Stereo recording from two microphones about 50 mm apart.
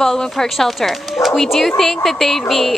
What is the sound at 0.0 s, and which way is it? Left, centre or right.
A woman's voice, centre.